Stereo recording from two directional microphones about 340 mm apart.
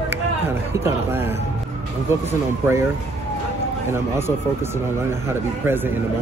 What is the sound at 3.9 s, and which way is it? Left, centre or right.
Speech, centre.